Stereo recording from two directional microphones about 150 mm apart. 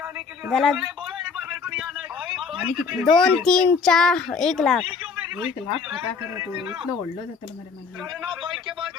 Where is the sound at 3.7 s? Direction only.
5° left (ahead or behind).